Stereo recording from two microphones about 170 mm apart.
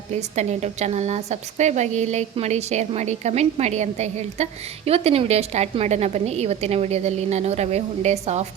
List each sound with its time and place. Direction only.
0.1 s a woman's voice: 40° right (ahead or behind)